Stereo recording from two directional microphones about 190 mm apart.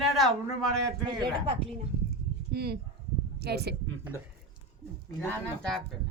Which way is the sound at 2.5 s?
55° right (ahead or behind).